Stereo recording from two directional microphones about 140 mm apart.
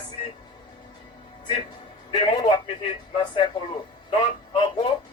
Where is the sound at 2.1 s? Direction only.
35° left (ahead or behind).